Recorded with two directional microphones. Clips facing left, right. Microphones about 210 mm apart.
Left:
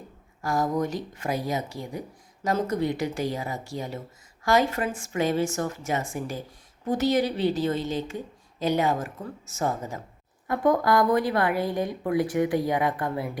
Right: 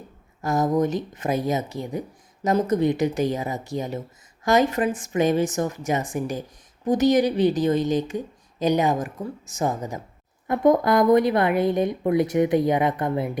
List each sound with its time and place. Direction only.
0.4 s a woman's voice: 20° right (ahead or behind)